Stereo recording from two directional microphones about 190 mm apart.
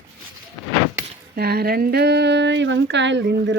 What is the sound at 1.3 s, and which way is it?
Speech, 55° right (ahead or behind).